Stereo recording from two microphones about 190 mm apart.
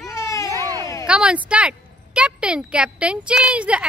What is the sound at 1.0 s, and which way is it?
Speech, 5° right (ahead or behind).